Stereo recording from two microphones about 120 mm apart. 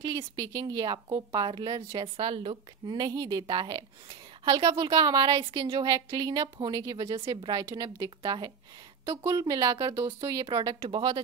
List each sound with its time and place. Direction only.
0.0 s a woman's voice: 40° right (ahead or behind)
10.0 s a woman's voice: 35° right (ahead or behind)